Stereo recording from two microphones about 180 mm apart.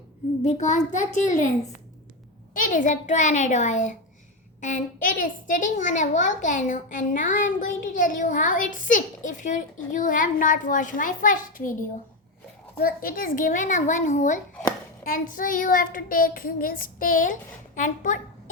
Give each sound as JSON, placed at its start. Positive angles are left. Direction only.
{"t": 0.4, "sound": "a child's voice", "side_deg": 40}
{"t": 2.5, "sound": "a child's voice", "side_deg": 50}